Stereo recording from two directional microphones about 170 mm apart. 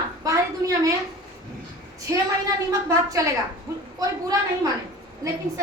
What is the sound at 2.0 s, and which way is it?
A woman's voice, 20° right (ahead or behind).